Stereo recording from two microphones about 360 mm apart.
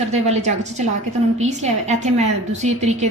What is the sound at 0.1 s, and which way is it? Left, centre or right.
A woman's voice, centre.